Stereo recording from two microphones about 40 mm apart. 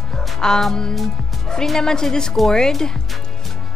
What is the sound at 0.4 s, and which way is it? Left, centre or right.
Speech, centre.